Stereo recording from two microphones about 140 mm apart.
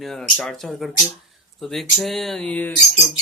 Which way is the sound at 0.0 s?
5° left (ahead or behind).